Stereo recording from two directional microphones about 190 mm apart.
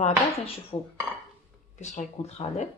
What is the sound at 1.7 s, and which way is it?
Speech, 40° left (ahead or behind).